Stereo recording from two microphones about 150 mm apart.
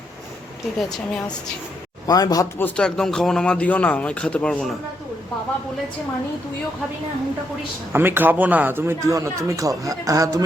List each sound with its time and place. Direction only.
0.8 s speech: centre (ahead or behind)
2.0 s speech: 25° left (ahead or behind)
2.6 s speech: 10° left (ahead or behind)
7.9 s a man's voice: 15° right (ahead or behind)